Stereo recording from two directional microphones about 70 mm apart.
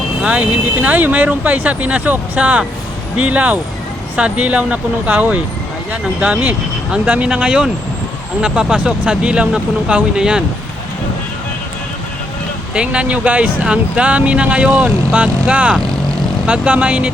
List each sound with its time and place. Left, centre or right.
0.2 s speech: centre
12.7 s speech: centre